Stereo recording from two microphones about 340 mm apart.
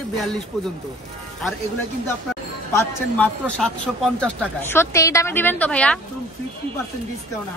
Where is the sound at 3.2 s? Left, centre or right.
Centre.